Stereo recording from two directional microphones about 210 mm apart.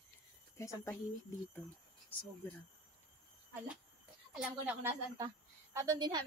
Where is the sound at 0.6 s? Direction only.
15° left (ahead or behind).